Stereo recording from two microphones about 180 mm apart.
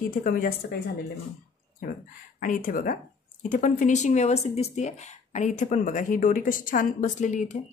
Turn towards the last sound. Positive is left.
turn(degrees=45)  # may be behind; listen again after turning